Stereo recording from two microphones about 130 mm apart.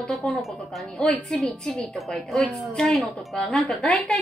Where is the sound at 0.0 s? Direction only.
5° left (ahead or behind).